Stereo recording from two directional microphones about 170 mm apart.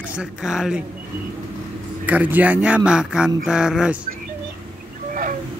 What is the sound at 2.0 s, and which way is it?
Speech, 10° right (ahead or behind).